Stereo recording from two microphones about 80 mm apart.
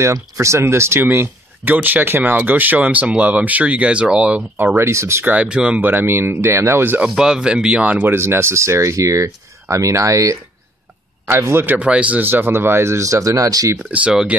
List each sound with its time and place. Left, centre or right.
0.0 s speech: right; by 4.5 s centre
4.7 s speech: right
5.2 s speech: centre
5.8 s speech: right
7.0 s speech: centre; by 11.7 s right
11.7 s speech: centre; by 13.7 s right
13.7 s speech: centre